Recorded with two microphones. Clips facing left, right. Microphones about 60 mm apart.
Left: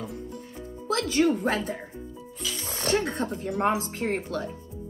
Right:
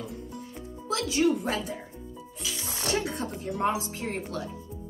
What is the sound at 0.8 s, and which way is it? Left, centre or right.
Speech, left.